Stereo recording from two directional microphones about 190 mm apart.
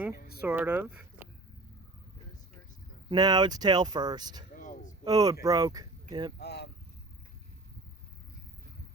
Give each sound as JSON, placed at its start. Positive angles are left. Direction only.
{"t": 0.2, "sound": "speech", "side_deg": 55}
{"t": 0.4, "sound": "speech", "side_deg": -10}
{"t": 3.1, "sound": "speech", "side_deg": -20}
{"t": 4.5, "sound": "a sound", "side_deg": 40}
{"t": 5.0, "sound": "speech", "side_deg": -20}
{"t": 6.4, "sound": "speech", "side_deg": 60}